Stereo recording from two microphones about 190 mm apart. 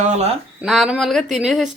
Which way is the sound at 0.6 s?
Centre (ahead or behind).